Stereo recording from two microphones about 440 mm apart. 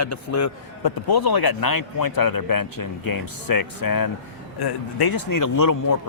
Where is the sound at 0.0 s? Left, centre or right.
Left.